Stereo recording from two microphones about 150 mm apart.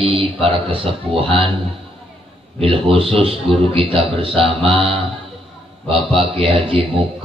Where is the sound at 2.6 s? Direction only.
35° right (ahead or behind).